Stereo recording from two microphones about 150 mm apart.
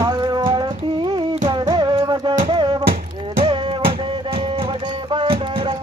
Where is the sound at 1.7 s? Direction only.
30° right (ahead or behind).